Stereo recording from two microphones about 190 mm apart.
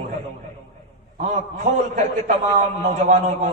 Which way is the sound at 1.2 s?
35° right (ahead or behind).